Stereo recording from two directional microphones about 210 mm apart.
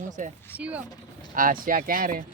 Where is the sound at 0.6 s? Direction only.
5° right (ahead or behind).